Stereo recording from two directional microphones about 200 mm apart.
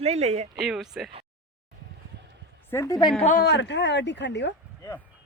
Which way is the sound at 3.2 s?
40° left (ahead or behind).